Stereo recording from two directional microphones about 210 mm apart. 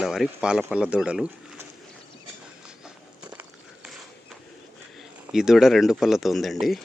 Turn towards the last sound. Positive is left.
turn(degrees=0)  # may be behind; listen again after turning